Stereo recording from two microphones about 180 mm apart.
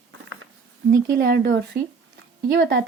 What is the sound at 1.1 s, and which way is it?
Speech, 50° right (ahead or behind).